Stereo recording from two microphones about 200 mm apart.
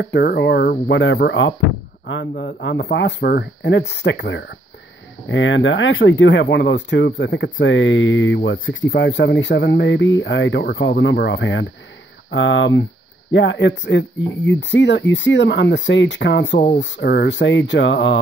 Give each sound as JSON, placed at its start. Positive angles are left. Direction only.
{"t": 0.0, "sound": "speech", "side_deg": 50}